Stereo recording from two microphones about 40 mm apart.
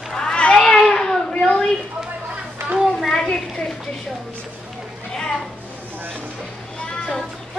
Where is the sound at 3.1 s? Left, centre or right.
Centre.